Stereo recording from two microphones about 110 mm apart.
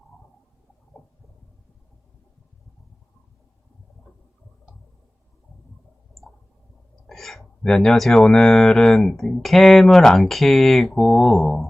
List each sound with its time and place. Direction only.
7.1 s speech: 5° left (ahead or behind)